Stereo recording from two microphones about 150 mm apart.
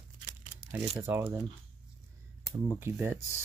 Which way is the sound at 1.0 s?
20° right (ahead or behind).